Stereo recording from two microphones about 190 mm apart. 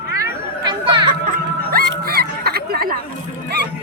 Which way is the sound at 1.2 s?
50° right (ahead or behind).